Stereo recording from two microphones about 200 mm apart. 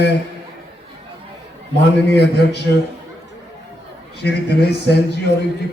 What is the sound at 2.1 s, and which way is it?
Speech, 55° left (ahead or behind).